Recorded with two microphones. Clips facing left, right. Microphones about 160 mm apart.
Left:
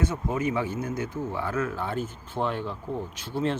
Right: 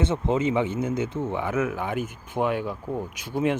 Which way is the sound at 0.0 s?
25° right (ahead or behind).